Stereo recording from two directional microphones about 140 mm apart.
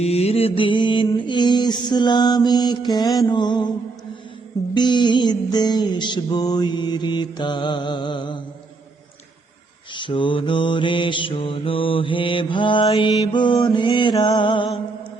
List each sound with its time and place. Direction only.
0.0 s mantra: 45° left (ahead or behind)
4.7 s mantra: 30° left (ahead or behind)
9.9 s mantra: 35° left (ahead or behind)